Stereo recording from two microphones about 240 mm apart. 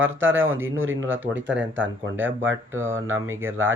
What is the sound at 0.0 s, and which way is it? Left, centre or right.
Speech, right.